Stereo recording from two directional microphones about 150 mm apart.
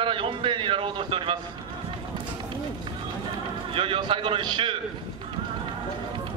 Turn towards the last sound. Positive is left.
turn(degrees=-30)  # may be behind; listen again after turning